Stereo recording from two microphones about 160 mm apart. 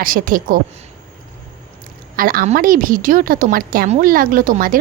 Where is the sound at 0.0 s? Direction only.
60° right (ahead or behind).